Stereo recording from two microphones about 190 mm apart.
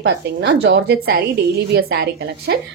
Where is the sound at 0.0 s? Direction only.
65° right (ahead or behind).